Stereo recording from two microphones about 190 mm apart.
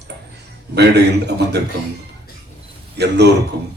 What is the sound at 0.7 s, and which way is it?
Speech, 65° right (ahead or behind).